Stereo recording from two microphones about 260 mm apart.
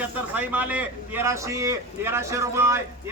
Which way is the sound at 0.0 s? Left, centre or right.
Centre.